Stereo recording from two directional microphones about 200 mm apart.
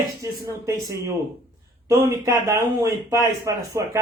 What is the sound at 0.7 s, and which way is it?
Speech, 15° right (ahead or behind).